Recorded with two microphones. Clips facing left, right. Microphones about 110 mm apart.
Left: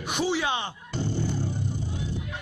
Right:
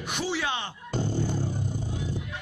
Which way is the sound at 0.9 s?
45° right (ahead or behind).